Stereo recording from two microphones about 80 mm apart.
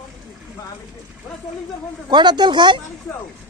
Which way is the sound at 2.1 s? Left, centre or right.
Right.